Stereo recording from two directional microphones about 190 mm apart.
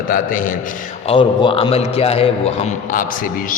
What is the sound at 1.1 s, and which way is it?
A man's voice, 25° left (ahead or behind).